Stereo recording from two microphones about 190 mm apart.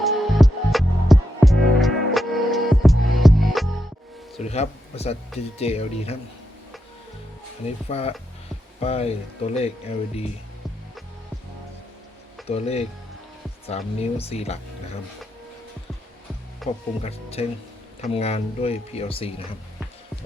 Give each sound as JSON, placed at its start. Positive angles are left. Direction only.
{"t": 0.0, "sound": "music", "side_deg": 0}
{"t": 4.4, "sound": "a man's voice", "side_deg": 35}
{"t": 7.9, "sound": "speech", "side_deg": 30}
{"t": 12.5, "sound": "speech", "side_deg": 35}
{"t": 16.6, "sound": "speech", "side_deg": 0}
{"t": 17.0, "sound": "speech", "side_deg": 30}